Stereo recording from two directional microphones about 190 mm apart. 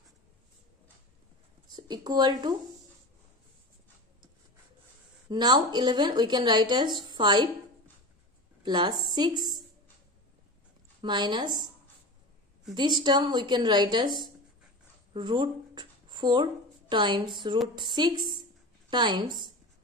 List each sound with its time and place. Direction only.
1.7 s speech: 20° right (ahead or behind)
5.3 s speech: 20° right (ahead or behind)
8.6 s speech: 25° right (ahead or behind)
11.0 s speech: 25° right (ahead or behind)
12.7 s speech: 20° right (ahead or behind)
15.1 s speech: 25° right (ahead or behind)